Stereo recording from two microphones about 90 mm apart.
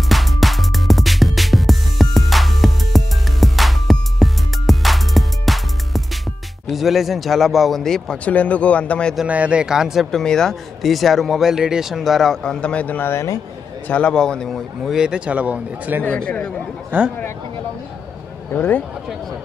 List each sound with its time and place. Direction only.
0.1 s music: centre (ahead or behind)
6.7 s speech: centre (ahead or behind)
8.3 s a man's voice: 15° left (ahead or behind)
9.3 s speech: 15° right (ahead or behind)
10.1 s speech: 5° left (ahead or behind); by 13.3 s 25° left (ahead or behind)
13.8 s a man's voice: 15° left (ahead or behind)
15.0 s speech: 10° right (ahead or behind)
16.0 s a man's voice: 15° left (ahead or behind)
16.9 s a man's voice: 20° right (ahead or behind)
18.5 s speech: 20° left (ahead or behind)